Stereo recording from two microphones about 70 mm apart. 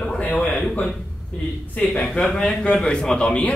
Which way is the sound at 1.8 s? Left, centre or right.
Centre.